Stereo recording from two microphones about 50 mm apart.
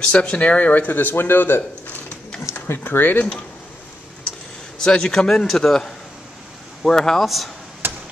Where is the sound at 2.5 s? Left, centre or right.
Left.